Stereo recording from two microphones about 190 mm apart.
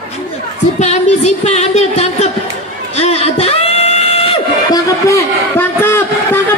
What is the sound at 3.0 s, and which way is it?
Singing, 35° left (ahead or behind).